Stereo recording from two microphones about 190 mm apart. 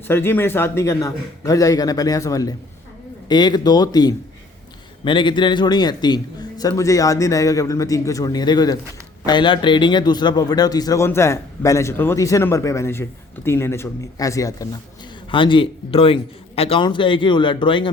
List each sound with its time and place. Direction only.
0.1 s a man's voice: 10° left (ahead or behind)